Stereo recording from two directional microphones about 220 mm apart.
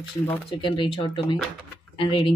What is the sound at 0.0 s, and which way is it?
Speech, 25° left (ahead or behind).